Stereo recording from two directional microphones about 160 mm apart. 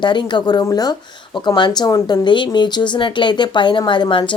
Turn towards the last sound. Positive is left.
turn(degrees=30)  # may be behind; listen again after turning